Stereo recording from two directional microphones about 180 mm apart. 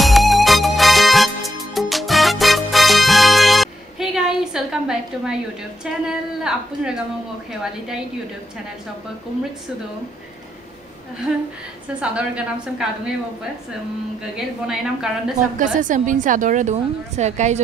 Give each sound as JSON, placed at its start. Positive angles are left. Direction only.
{"t": 0.0, "sound": "music", "side_deg": 0}
{"t": 6.0, "sound": "a woman's voice", "side_deg": -5}
{"t": 12.0, "sound": "a woman's voice", "side_deg": -5}
{"t": 14.3, "sound": "a woman's voice", "side_deg": -5}
{"t": 15.6, "sound": "a woman's voice", "side_deg": -45}